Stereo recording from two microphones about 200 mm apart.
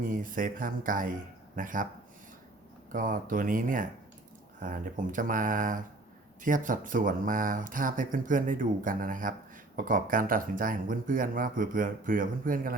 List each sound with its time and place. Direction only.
0.0 s speech: 45° right (ahead or behind)
2.9 s speech: 40° right (ahead or behind)